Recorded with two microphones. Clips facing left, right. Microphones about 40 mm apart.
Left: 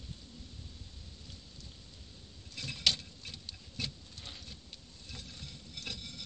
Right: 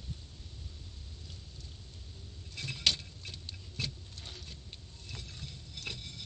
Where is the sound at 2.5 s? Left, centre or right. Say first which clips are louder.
Right 1 dB; centre.